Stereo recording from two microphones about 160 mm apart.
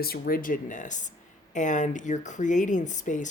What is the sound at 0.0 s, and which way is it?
Speech, 70° left (ahead or behind).